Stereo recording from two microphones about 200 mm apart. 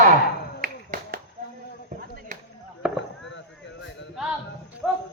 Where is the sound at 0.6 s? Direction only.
45° right (ahead or behind).